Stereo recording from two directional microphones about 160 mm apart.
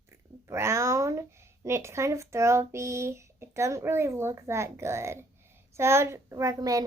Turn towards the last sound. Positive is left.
turn(degrees=-20)  # may be behind; listen again after turning